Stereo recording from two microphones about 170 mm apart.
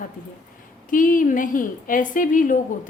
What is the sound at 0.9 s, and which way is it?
A woman's voice, 55° left (ahead or behind).